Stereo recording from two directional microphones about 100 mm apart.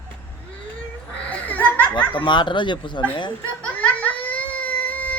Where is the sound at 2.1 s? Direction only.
55° left (ahead or behind).